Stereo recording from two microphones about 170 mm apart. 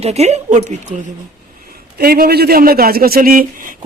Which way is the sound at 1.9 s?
65° right (ahead or behind).